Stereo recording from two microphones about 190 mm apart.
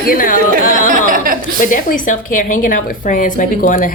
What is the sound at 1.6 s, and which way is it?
Speech, 45° left (ahead or behind).